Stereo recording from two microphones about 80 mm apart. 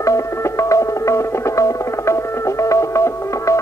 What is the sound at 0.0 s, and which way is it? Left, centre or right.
Music, left.